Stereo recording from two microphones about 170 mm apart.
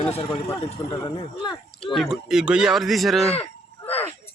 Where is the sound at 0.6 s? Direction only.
30° left (ahead or behind).